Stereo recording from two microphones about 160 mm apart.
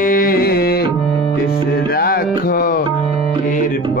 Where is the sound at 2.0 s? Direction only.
65° left (ahead or behind).